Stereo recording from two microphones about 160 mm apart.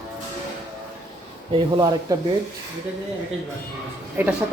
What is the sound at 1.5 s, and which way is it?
Speech, 25° right (ahead or behind).